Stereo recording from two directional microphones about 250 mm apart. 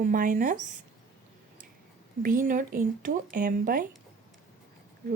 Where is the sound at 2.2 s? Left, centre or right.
Right.